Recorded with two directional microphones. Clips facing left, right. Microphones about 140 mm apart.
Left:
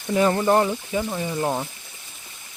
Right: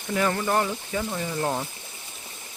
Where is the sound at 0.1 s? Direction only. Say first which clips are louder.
Left 6 dB; 25° left (ahead or behind).